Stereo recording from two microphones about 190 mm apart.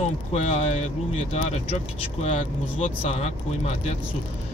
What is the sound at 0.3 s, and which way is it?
Speech, 35° left (ahead or behind).